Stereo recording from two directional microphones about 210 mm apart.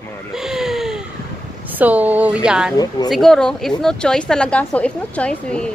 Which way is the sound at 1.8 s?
10° right (ahead or behind).